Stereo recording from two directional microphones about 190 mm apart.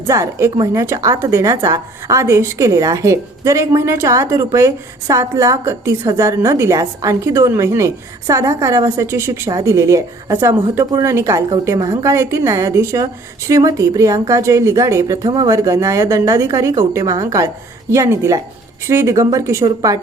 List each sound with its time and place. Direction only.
0.1 s a woman's voice: 15° right (ahead or behind)